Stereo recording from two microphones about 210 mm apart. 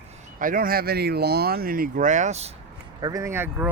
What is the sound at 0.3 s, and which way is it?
Speech, 40° right (ahead or behind).